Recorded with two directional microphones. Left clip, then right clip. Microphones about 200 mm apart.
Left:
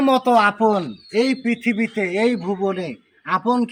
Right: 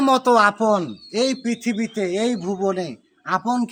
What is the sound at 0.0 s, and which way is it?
A man's voice, 15° right (ahead or behind).